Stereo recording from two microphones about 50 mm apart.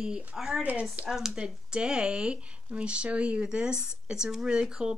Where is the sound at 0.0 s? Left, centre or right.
Centre.